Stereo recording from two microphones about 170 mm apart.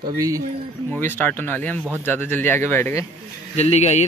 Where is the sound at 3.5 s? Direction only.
40° left (ahead or behind).